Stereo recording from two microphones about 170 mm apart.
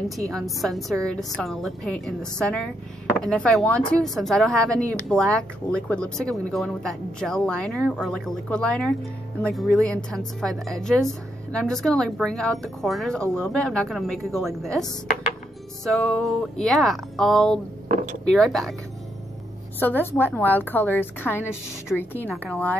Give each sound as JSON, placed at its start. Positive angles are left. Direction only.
{"t": 0.2, "sound": "speech", "side_deg": 0}
{"t": 17.8, "sound": "a sound", "side_deg": -50}
{"t": 18.2, "sound": "speech", "side_deg": 0}
{"t": 19.8, "sound": "a woman's voice", "side_deg": 10}